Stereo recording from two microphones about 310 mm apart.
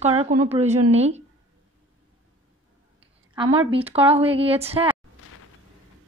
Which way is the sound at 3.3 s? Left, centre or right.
Centre.